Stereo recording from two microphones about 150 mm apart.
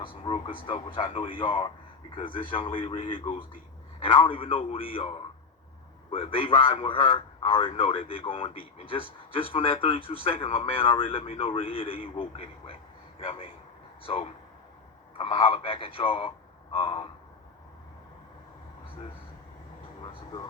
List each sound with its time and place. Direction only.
0.1 s a man's voice: 35° left (ahead or behind)